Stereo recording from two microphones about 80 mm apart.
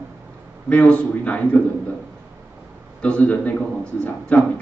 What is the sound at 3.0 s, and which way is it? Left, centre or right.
A man's voice, centre.